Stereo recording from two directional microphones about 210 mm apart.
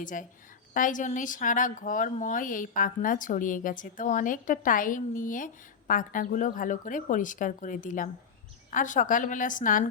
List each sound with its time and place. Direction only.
0.0 s a woman's voice: 40° left (ahead or behind)